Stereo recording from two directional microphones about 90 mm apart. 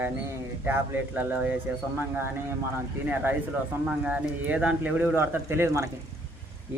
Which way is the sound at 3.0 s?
20° right (ahead or behind).